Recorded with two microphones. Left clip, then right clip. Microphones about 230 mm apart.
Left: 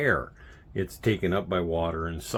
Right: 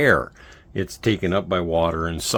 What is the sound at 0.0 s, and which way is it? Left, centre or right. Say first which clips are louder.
Speech: right 8 dB; right.